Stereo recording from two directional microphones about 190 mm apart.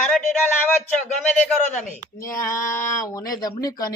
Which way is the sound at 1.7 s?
15° left (ahead or behind).